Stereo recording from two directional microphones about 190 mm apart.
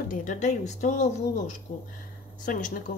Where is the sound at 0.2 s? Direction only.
40° left (ahead or behind).